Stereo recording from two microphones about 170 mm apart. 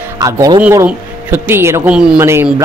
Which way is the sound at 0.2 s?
20° right (ahead or behind).